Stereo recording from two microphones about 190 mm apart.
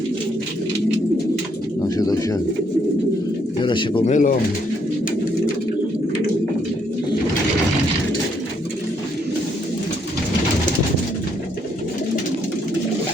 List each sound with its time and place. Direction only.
2.0 s speech: 20° left (ahead or behind)
3.6 s speech: 25° left (ahead or behind)
4.0 s speech: 40° left (ahead or behind)